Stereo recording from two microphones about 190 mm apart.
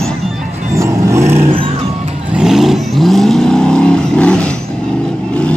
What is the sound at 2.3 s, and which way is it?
Vehicle, centre (ahead or behind).